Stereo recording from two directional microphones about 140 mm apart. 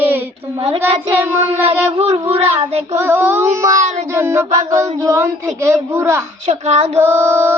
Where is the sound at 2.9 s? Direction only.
15° right (ahead or behind).